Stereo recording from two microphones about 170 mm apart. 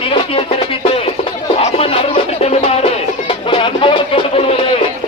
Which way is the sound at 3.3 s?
30° left (ahead or behind).